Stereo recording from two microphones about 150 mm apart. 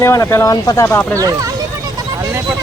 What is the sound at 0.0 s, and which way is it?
Speech, 20° left (ahead or behind).